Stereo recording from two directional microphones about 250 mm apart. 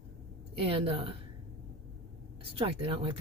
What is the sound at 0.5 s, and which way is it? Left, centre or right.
Speech, right.